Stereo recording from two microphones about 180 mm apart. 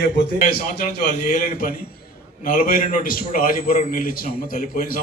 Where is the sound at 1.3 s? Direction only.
50° left (ahead or behind).